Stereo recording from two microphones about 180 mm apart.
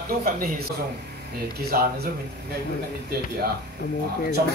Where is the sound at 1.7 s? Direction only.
55° right (ahead or behind).